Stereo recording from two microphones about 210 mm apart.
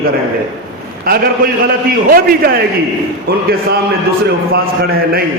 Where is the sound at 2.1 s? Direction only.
45° right (ahead or behind).